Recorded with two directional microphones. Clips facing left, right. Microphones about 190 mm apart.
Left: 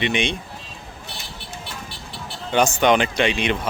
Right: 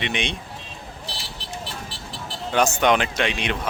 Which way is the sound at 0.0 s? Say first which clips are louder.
Left 5 dB; centre (ahead or behind).